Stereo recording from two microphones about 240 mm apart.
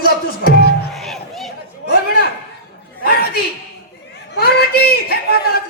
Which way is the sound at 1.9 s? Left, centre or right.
Left.